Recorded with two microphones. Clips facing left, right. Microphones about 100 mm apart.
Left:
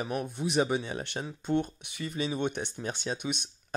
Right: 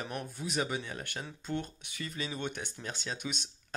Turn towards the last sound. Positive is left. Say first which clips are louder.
# left 6 dB
turn(degrees=20)  # may be behind; listen again after turning